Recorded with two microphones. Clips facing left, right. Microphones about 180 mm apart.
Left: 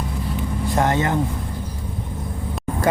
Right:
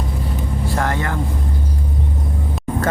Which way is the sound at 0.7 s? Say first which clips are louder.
Left 4 dB; 20° left (ahead or behind).